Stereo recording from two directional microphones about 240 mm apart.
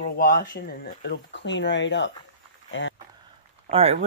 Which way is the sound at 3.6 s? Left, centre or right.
Right.